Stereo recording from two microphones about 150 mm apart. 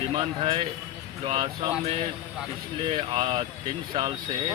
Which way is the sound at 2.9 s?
35° right (ahead or behind).